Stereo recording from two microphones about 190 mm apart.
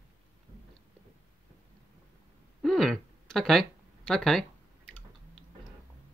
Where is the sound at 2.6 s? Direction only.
Centre (ahead or behind).